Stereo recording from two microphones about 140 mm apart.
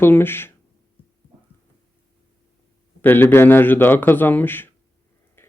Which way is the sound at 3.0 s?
15° left (ahead or behind).